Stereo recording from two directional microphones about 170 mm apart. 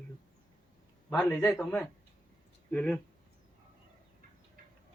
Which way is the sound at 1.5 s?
5° left (ahead or behind).